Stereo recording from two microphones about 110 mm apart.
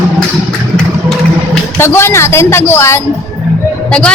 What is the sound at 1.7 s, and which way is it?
A woman's voice, 20° left (ahead or behind).